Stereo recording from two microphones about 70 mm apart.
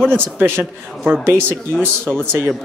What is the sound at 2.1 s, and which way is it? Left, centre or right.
Speech, right.